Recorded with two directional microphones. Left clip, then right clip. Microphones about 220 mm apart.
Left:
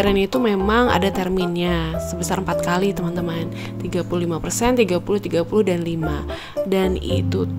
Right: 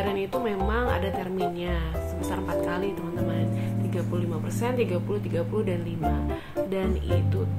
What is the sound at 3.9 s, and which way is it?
Speech, 45° left (ahead or behind).